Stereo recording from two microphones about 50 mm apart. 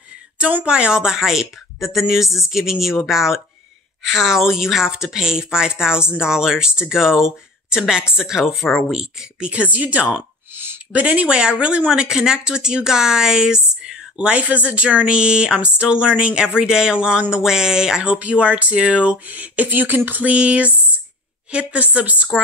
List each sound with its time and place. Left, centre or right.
0.7 s speech: centre
9.5 s speech: right
10.5 s a sound: right
10.9 s speech: right